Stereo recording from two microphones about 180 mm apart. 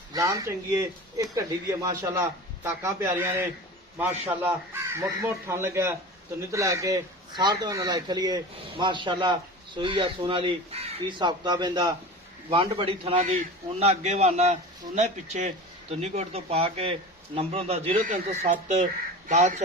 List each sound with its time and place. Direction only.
0.1 s a man's voice: 20° right (ahead or behind)
13.1 s a man's voice: 45° right (ahead or behind)
18.0 s a man's voice: 45° right (ahead or behind)